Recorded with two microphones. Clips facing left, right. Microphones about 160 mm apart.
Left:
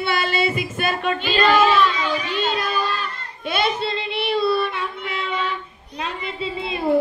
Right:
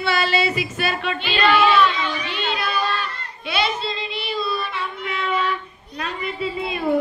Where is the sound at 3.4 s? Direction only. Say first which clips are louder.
Left 2 dB; 50° left (ahead or behind); by 4.7 s 65° left (ahead or behind).